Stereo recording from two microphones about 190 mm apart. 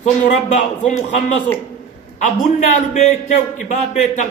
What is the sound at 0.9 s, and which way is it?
Speech, 40° left (ahead or behind).